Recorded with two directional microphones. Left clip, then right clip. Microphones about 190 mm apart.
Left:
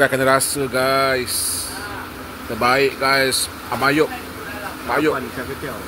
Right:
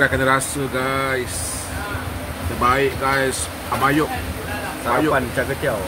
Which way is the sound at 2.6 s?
25° left (ahead or behind).